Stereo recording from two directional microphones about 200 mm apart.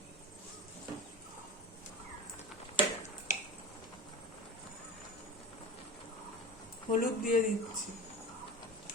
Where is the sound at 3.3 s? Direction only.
40° left (ahead or behind).